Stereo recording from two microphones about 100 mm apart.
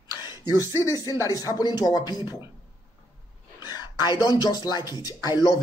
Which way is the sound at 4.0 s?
40° left (ahead or behind).